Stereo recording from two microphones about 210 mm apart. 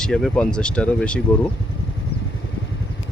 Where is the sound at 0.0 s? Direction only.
5° left (ahead or behind).